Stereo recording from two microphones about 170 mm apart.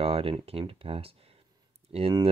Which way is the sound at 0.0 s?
35° right (ahead or behind).